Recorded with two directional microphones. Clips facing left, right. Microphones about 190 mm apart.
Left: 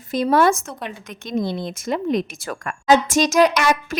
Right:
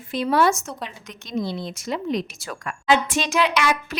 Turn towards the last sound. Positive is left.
turn(degrees=45)  # may be behind; listen again after turning